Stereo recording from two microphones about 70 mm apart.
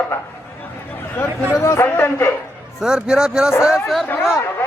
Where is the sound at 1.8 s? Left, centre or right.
Left.